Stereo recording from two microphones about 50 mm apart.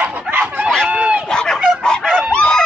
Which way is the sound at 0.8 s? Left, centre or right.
Right.